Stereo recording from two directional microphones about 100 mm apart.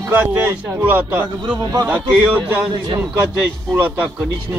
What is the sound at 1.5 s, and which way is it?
Speech, 45° right (ahead or behind).